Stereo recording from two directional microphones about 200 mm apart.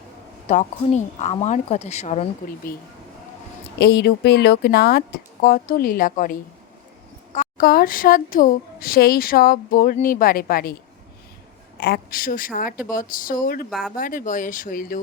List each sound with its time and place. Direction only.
0.4 s a woman's voice: 35° left (ahead or behind)
3.8 s a woman's voice: 50° left (ahead or behind)
7.3 s a woman's voice: 45° left (ahead or behind)
11.8 s a woman's voice: 50° left (ahead or behind)
13.7 s speech: centre (ahead or behind)
13.9 s a woman's voice: 45° left (ahead or behind)